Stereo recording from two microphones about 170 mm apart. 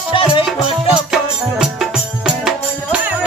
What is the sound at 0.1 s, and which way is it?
Music, 30° left (ahead or behind).